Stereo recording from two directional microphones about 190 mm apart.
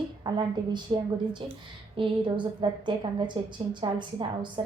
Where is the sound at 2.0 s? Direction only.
25° right (ahead or behind).